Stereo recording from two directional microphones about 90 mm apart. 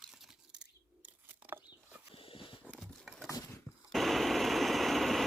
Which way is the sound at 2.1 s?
75° left (ahead or behind).